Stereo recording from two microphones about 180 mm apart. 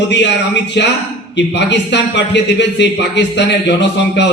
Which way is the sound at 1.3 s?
75° left (ahead or behind).